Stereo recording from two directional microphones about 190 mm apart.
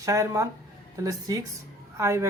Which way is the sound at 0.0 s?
15° right (ahead or behind).